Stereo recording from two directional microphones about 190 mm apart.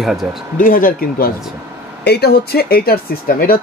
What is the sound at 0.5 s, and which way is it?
Speech, 45° left (ahead or behind).